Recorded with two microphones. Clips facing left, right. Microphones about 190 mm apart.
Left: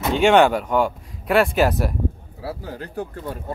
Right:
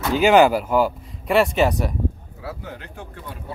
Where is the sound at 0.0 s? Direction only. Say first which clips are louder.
Even; centre (ahead or behind).